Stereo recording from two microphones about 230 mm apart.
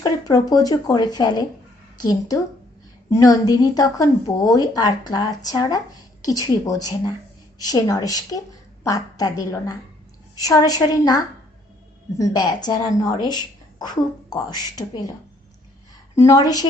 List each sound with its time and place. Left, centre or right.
0.0 s a woman's voice: centre
16.1 s a woman's voice: centre